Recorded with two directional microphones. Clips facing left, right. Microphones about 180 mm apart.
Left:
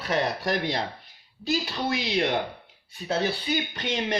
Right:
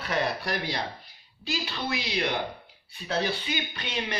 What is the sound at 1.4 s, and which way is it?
Speech, 40° left (ahead or behind).